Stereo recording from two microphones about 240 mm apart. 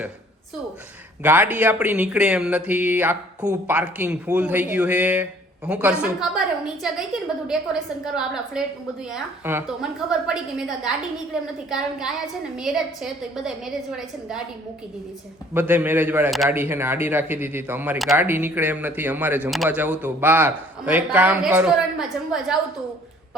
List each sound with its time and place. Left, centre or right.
1.2 s speech: centre
15.5 s a man's voice: centre